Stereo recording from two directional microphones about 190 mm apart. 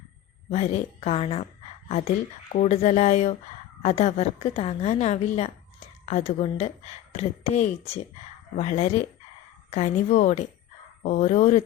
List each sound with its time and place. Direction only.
0.5 s a woman's voice: 35° left (ahead or behind)